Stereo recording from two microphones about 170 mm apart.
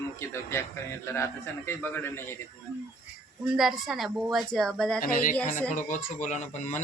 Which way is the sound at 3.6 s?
Centre (ahead or behind).